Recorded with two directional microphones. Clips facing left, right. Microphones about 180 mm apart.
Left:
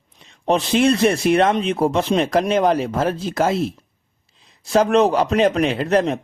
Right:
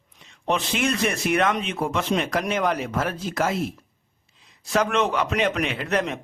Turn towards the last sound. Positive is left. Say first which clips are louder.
# left 7 dB
turn(degrees=35)  # may be behind; listen again after turning